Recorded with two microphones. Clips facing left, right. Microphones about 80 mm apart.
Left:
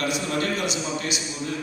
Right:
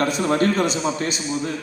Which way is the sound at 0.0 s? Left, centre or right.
Right.